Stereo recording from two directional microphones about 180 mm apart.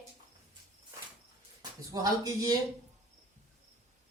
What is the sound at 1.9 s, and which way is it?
Music, 20° right (ahead or behind).